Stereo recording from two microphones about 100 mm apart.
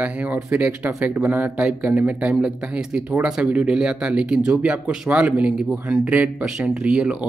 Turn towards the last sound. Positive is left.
turn(degrees=-10)  # may be behind; listen again after turning